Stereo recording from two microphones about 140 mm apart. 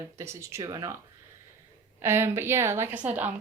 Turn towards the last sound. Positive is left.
turn(degrees=-10)  # may be behind; listen again after turning